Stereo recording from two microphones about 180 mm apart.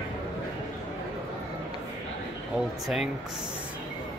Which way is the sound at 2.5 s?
Centre (ahead or behind).